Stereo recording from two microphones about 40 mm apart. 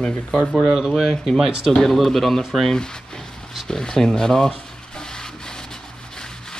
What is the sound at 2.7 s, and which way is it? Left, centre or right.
Speech, centre.